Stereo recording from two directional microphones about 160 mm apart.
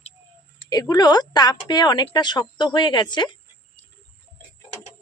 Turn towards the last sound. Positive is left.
turn(degrees=30)  # may be behind; listen again after turning